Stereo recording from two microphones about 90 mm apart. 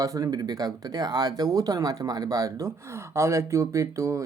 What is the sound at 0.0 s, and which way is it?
Speech, 40° right (ahead or behind).